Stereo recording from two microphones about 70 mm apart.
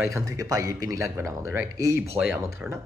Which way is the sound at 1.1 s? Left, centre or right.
Right.